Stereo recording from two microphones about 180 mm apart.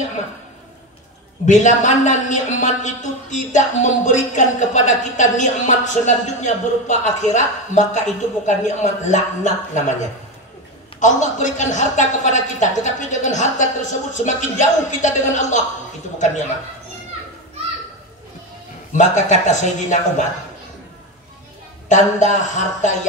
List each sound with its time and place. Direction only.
1.4 s a man's voice: 40° left (ahead or behind)
11.0 s a man's voice: 40° left (ahead or behind)
18.9 s a man's voice: 40° left (ahead or behind)
21.8 s a man's voice: 45° left (ahead or behind)